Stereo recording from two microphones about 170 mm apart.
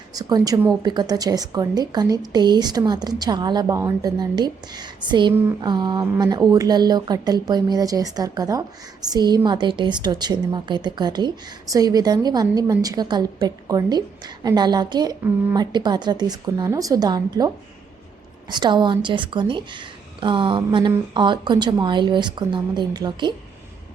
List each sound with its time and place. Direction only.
0.1 s speech: 20° right (ahead or behind)